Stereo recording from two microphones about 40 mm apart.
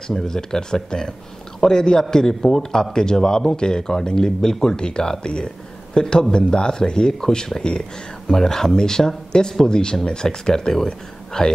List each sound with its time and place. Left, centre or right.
0.1 s a man's voice: centre